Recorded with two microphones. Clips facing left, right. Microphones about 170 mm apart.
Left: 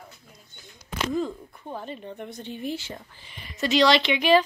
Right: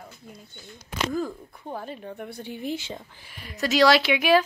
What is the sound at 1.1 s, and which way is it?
Speech, 10° right (ahead or behind).